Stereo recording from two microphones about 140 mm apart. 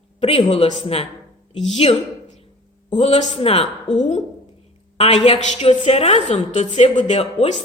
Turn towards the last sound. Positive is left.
turn(degrees=50)  # may be behind; listen again after turning